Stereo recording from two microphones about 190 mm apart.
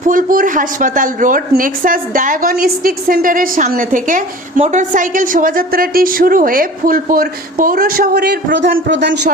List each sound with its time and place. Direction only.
0.0 s speech: 45° right (ahead or behind); by 9.3 s 65° right (ahead or behind)